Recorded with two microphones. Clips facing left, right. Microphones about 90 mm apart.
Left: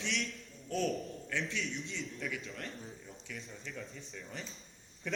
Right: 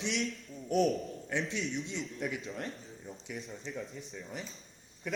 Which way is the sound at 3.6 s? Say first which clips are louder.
Right 4 dB; 20° right (ahead or behind).